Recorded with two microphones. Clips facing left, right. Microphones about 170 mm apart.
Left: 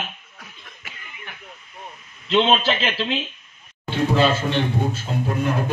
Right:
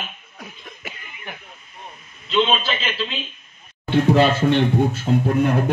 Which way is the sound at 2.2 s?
75° left (ahead or behind).